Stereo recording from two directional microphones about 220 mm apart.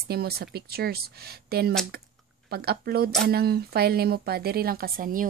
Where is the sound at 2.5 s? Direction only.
45° right (ahead or behind).